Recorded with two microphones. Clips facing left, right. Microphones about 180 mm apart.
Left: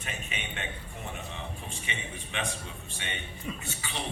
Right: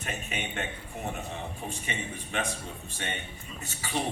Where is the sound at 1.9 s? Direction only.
45° right (ahead or behind).